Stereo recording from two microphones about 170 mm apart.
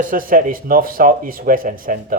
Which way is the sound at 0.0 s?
55° right (ahead or behind).